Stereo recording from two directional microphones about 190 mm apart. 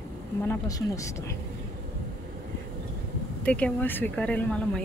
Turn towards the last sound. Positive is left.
turn(degrees=5)  # may be behind; listen again after turning